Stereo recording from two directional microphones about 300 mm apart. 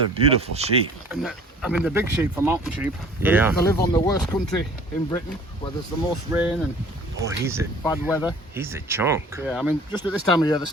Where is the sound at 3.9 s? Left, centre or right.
Centre.